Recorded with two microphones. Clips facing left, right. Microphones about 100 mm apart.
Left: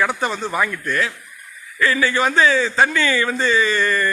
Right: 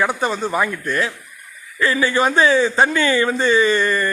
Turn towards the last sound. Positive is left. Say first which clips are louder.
# right 2 dB
turn(degrees=-25)  # may be behind; listen again after turning